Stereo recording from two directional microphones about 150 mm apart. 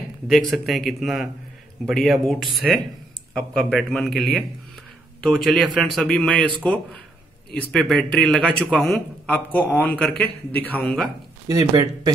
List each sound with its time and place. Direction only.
0.3 s a man's voice: centre (ahead or behind)
11.4 s speech: 25° right (ahead or behind)